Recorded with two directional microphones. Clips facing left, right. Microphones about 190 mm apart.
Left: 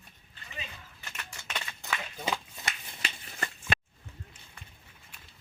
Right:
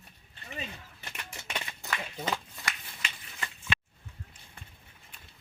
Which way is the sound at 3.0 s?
40° left (ahead or behind).